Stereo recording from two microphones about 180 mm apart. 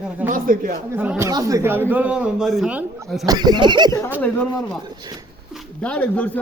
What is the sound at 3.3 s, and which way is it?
Speech, 25° right (ahead or behind).